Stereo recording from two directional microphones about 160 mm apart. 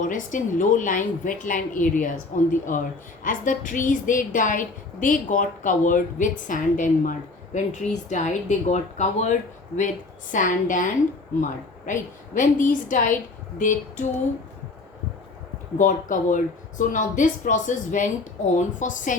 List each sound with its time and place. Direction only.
0.0 s a woman's voice: 55° left (ahead or behind)
11.9 s a woman's voice: 55° left (ahead or behind)
15.8 s a woman's voice: 55° left (ahead or behind)